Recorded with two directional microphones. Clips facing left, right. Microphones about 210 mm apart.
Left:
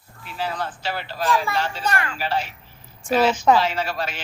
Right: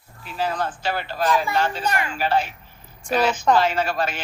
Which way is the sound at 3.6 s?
50° right (ahead or behind).